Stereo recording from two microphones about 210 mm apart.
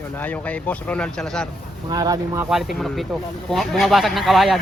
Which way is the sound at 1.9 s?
20° right (ahead or behind).